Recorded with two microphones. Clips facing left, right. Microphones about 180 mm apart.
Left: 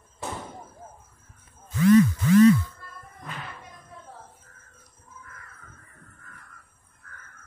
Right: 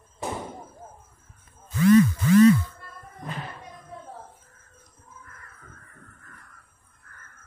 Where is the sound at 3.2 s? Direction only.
35° right (ahead or behind).